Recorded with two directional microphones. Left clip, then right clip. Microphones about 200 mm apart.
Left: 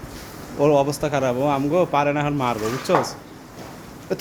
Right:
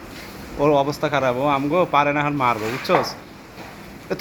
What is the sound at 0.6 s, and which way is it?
Speech, 20° left (ahead or behind).